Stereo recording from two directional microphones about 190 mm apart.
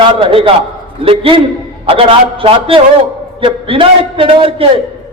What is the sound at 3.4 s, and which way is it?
A man's voice, 30° right (ahead or behind).